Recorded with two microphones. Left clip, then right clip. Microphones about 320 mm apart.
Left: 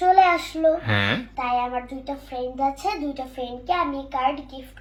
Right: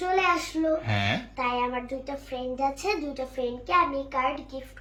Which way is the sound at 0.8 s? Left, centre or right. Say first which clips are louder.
Left 5 dB; centre.